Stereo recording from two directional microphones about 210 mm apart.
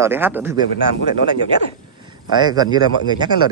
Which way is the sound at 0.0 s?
10° right (ahead or behind).